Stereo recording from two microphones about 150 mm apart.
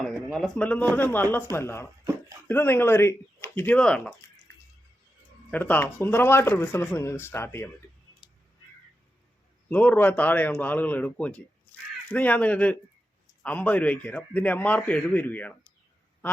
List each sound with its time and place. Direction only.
0.0 s speech: centre (ahead or behind)
5.5 s speech: 10° left (ahead or behind)
9.6 s speech: 10° left (ahead or behind)
11.7 s caw: 10° left (ahead or behind)
12.0 s speech: 10° left (ahead or behind)